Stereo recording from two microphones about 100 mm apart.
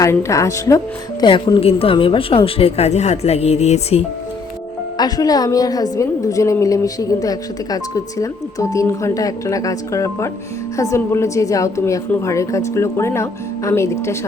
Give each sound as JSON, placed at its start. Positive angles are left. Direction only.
{"t": 0.0, "sound": "a woman's voice", "side_deg": 30}
{"t": 1.2, "sound": "speech", "side_deg": 50}
{"t": 1.6, "sound": "speech", "side_deg": 70}
{"t": 4.9, "sound": "a woman's voice", "side_deg": 40}